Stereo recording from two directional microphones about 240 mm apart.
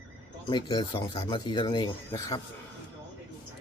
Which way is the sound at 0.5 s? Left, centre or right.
Centre.